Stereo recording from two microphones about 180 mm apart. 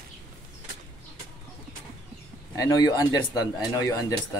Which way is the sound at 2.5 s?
20° left (ahead or behind).